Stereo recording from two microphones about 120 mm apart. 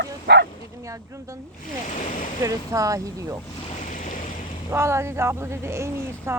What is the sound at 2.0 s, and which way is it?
Speech, 90° left.